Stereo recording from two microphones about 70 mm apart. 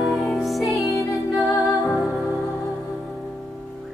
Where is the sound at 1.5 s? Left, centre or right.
Centre.